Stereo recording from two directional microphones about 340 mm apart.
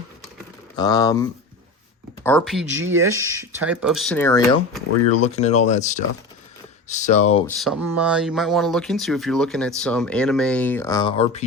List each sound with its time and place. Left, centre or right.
0.8 s speech: centre
5.2 s speech: centre
7.6 s speech: centre